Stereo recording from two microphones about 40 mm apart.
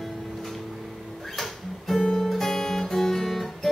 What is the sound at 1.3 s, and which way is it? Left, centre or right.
Music, centre.